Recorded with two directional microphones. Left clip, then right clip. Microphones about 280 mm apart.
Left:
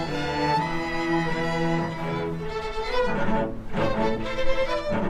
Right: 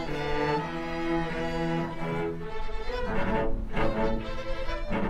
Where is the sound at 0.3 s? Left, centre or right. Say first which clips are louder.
Left 4 dB; right.